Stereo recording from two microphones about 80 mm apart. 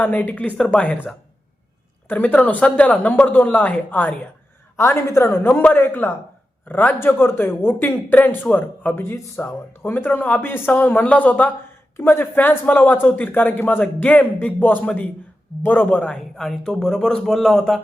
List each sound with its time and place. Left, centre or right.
0.0 s speech: left
2.0 s speech: left
4.8 s speech: left
9.1 s speech: left
9.9 s speech: left
16.3 s speech: centre